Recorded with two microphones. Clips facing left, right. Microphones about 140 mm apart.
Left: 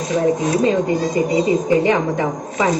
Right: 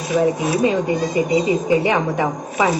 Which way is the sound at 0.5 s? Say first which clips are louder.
Left 1 dB; 15° right (ahead or behind).